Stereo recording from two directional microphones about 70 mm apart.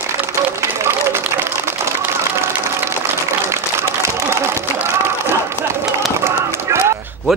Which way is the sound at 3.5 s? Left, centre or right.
Right.